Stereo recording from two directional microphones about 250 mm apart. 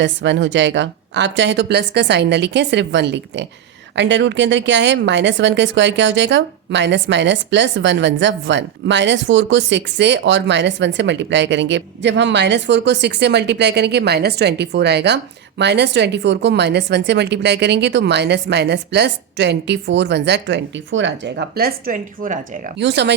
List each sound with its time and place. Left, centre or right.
0.0 s speech: right
22.8 s speech: right